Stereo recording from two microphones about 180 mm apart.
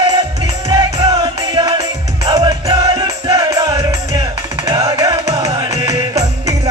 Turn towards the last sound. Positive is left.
turn(degrees=-35)  # may be behind; listen again after turning